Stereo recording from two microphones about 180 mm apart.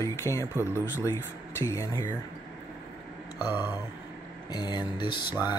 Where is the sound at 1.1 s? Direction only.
15° left (ahead or behind).